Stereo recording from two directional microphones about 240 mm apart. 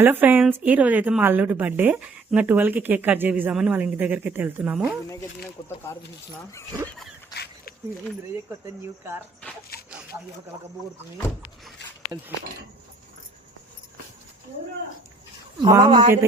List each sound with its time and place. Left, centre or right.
0.0 s a woman's voice: centre
5.6 s speech: centre
9.4 s speech: centre
15.6 s a woman's voice: centre